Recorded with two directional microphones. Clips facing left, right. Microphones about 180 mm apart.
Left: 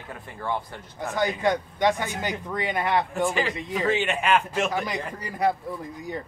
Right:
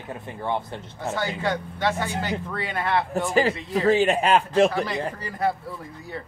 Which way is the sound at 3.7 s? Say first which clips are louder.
Right 6 dB; 40° right (ahead or behind).